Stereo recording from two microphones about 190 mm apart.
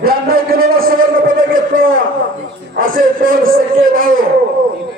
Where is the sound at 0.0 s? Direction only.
50° right (ahead or behind).